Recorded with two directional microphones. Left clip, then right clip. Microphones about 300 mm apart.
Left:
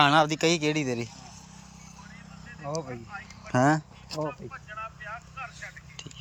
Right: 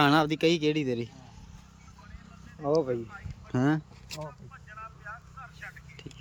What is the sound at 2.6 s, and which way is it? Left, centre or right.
Speech, centre.